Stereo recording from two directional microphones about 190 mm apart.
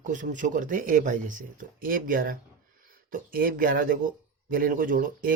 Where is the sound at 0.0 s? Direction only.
45° right (ahead or behind).